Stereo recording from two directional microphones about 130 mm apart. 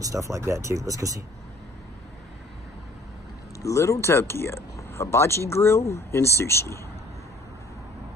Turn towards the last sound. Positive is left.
turn(degrees=20)  # may be behind; listen again after turning